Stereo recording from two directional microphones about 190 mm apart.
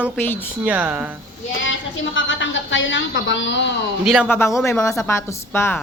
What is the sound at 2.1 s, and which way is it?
A woman's voice, 80° left.